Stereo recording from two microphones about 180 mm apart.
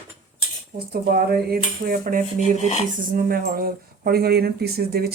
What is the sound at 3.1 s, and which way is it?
Speech, 50° right (ahead or behind).